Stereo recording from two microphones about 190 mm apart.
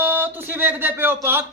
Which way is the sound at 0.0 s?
10° right (ahead or behind).